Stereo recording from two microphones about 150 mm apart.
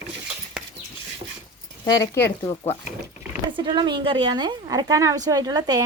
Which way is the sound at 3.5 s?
30° right (ahead or behind).